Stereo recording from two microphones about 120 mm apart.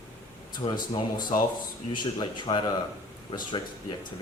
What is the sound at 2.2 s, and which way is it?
Speech, 40° left (ahead or behind).